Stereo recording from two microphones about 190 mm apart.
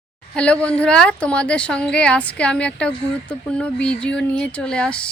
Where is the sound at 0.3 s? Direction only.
5° left (ahead or behind).